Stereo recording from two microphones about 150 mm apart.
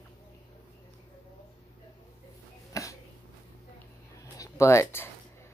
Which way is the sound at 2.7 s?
20° left (ahead or behind).